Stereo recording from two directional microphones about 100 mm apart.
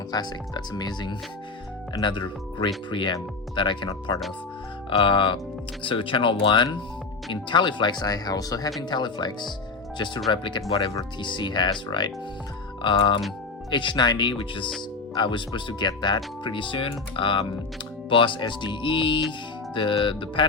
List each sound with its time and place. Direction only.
0.1 s speech: 45° left (ahead or behind); by 10.9 s 60° left (ahead or behind)
11.2 s speech: 50° left (ahead or behind)